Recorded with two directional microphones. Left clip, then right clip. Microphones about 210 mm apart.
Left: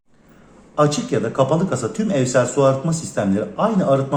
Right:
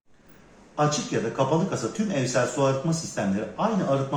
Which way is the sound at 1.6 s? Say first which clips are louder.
Left 6 dB; 50° left (ahead or behind).